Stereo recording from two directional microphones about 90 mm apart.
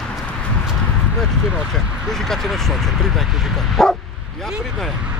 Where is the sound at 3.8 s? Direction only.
5° left (ahead or behind).